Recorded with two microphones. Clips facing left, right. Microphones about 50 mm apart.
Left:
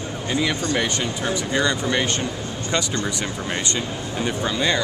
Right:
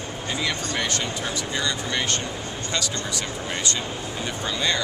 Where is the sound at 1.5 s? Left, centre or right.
Left.